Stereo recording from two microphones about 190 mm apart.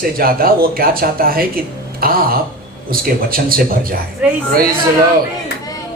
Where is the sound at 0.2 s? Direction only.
50° right (ahead or behind).